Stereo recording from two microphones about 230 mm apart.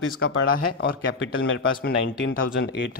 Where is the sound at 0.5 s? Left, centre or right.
Left.